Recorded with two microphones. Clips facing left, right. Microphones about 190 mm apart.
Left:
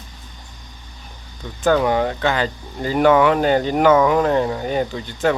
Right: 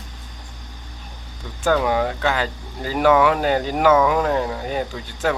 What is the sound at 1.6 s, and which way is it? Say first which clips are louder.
Speech: left 2 dB; centre (ahead or behind).